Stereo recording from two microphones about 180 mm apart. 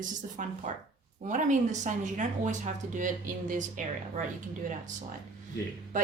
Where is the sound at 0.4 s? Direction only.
45° right (ahead or behind).